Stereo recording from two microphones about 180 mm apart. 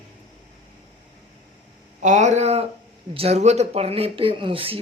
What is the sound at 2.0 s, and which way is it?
Speech, 40° right (ahead or behind).